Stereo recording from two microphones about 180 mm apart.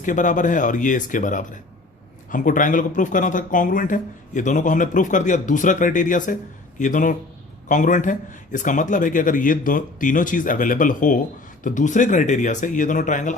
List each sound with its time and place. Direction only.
0.0 s speech: 45° left (ahead or behind)